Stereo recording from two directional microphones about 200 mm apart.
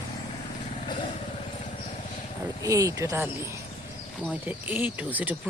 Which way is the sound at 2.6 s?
15° right (ahead or behind).